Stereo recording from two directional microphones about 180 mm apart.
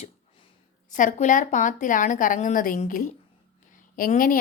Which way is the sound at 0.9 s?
45° left (ahead or behind).